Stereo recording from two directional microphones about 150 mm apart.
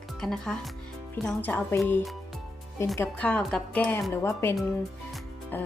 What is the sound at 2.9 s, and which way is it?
A woman's voice, 10° left (ahead or behind).